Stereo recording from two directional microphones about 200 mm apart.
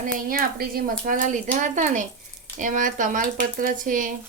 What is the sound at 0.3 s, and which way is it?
Speech, 45° right (ahead or behind).